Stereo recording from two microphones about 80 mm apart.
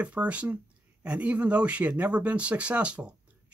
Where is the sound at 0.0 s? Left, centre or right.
Centre.